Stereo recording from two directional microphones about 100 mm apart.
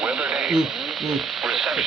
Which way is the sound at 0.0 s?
5° right (ahead or behind).